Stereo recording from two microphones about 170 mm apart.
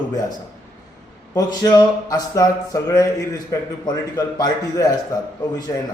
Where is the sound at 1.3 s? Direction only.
20° left (ahead or behind).